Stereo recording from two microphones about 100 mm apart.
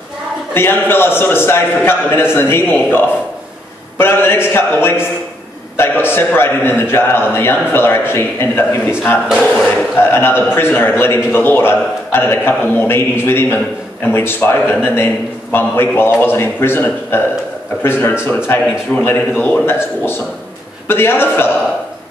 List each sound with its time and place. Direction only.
0.6 s a man's voice: 20° left (ahead or behind)
9.9 s a man's voice: 20° left (ahead or behind)